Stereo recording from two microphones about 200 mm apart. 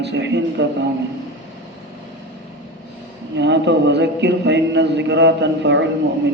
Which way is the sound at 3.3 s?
60° right (ahead or behind).